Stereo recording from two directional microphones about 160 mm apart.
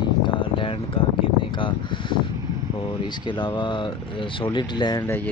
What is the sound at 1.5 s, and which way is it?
Speech, 30° left (ahead or behind).